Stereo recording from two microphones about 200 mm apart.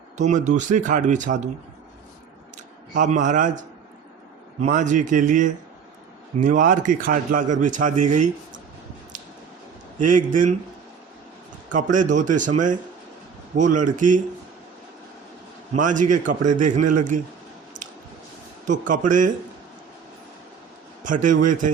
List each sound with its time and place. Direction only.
0.2 s a man's voice: 35° right (ahead or behind)
2.9 s a man's voice: 40° right (ahead or behind)
4.6 s a man's voice: 40° right (ahead or behind)
10.1 s a man's voice: 40° right (ahead or behind)
11.7 s a man's voice: 40° right (ahead or behind)
15.7 s a man's voice: 40° right (ahead or behind)
17.7 s squish: 40° right (ahead or behind)
18.6 s a man's voice: 40° right (ahead or behind)
21.0 s a man's voice: 40° right (ahead or behind)